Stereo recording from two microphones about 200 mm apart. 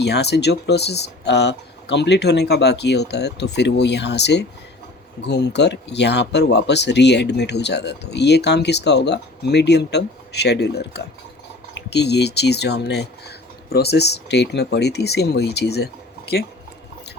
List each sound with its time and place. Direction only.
0.0 s speech: 55° left (ahead or behind)